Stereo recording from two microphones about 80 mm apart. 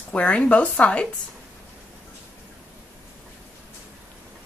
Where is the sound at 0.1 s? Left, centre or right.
Centre.